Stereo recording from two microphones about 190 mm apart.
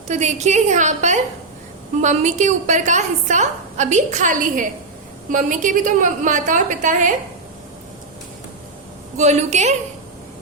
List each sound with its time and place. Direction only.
0.1 s a woman's voice: 40° right (ahead or behind)
9.1 s a woman's voice: 35° right (ahead or behind)